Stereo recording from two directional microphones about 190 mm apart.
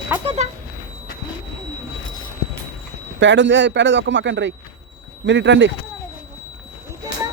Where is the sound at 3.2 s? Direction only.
75° right (ahead or behind).